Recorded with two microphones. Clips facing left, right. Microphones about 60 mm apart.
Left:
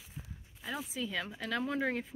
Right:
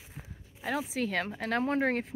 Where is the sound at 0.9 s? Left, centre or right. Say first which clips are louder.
Right 6 dB; right.